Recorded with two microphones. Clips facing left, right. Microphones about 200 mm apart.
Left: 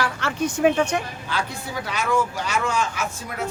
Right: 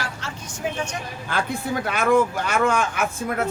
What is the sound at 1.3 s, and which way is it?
Speech, 50° right (ahead or behind).